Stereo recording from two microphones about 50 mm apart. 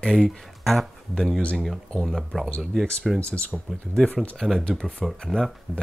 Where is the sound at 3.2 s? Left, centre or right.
Left.